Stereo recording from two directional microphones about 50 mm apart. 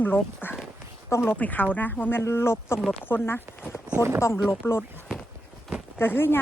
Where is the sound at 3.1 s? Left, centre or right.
Left.